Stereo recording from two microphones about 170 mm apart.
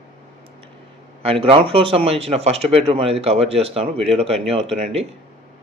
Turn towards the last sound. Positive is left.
turn(degrees=-35)  # may be behind; listen again after turning